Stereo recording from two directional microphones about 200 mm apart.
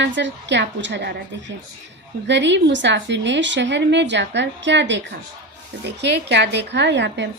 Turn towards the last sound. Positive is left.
turn(degrees=-60)  # may be behind; listen again after turning